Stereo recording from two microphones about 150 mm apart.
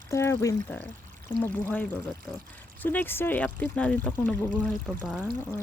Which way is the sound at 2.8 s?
15° left (ahead or behind).